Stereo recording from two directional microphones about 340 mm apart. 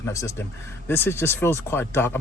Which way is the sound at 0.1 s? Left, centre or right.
Centre.